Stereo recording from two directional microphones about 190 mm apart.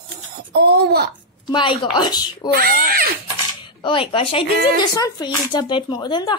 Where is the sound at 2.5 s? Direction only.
50° right (ahead or behind).